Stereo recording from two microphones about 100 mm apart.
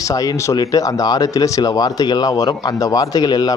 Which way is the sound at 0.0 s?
35° left (ahead or behind).